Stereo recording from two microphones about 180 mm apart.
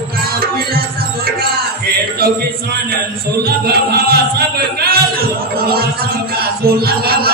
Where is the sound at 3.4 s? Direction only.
60° right (ahead or behind).